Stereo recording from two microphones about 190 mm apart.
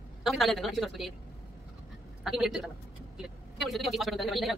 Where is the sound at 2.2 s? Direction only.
Centre (ahead or behind).